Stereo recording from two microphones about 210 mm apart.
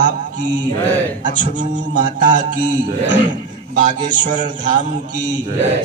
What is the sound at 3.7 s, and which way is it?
A man's voice, 40° right (ahead or behind).